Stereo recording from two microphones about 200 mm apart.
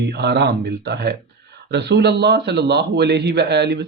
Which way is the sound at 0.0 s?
55° right (ahead or behind).